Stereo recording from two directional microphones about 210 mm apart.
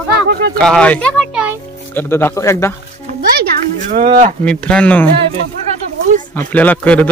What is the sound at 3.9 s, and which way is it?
Speech, 35° right (ahead or behind).